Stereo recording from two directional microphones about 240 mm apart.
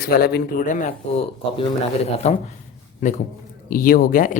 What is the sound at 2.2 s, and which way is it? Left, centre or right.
A man's voice, left.